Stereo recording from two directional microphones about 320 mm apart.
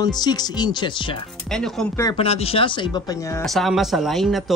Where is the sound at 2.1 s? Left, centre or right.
Centre.